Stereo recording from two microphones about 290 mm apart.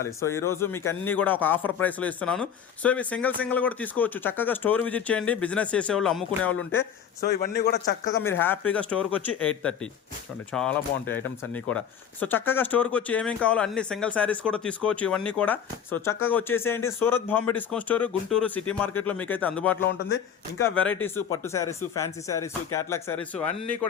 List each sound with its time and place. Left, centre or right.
0.0 s a man's voice: centre
7.2 s a man's voice: left
8.2 s a man's voice: centre